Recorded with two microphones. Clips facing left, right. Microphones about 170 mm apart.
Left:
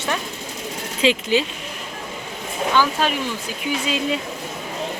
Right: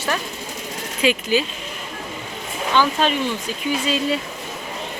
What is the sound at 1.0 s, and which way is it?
Speech, 25° left (ahead or behind).